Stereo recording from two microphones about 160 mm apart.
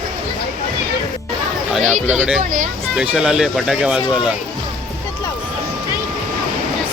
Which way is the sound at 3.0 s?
5° right (ahead or behind).